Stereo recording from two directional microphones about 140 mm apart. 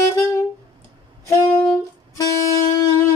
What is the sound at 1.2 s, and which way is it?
Saxophone, 20° left (ahead or behind).